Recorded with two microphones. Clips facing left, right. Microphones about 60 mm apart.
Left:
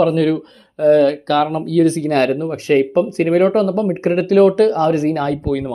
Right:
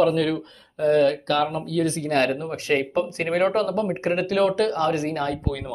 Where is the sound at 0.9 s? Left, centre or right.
Left.